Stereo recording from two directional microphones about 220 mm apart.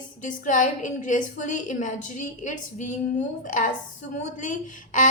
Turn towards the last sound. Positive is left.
turn(degrees=35)  # may be behind; listen again after turning